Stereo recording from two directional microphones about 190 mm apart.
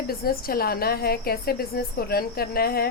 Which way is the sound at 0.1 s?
50° left (ahead or behind).